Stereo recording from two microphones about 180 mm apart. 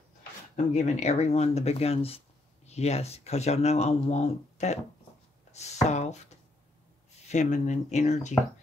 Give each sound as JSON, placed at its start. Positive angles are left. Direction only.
{"t": 0.7, "sound": "speech", "side_deg": 40}
{"t": 7.2, "sound": "speech", "side_deg": 40}